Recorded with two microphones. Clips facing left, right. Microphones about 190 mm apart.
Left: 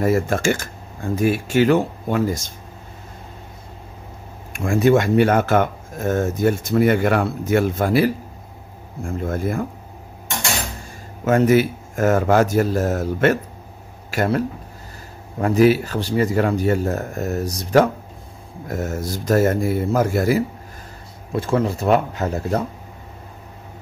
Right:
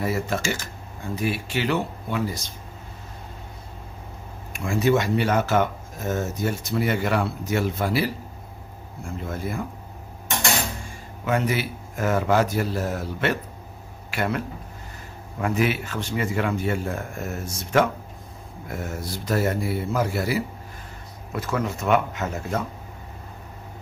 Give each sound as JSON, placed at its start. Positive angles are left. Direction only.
{"t": 0.0, "sound": "speech", "side_deg": 50}
{"t": 4.5, "sound": "speech", "side_deg": 50}
{"t": 11.2, "sound": "speech", "side_deg": 45}
{"t": 21.3, "sound": "speech", "side_deg": 30}